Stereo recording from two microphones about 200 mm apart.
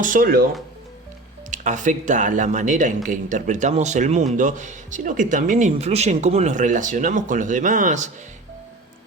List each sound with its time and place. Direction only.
0.0 s speech: 45° right (ahead or behind)
1.5 s speech: 40° right (ahead or behind)